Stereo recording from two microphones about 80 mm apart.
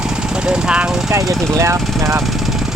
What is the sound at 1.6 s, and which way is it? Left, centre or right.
Speech, right.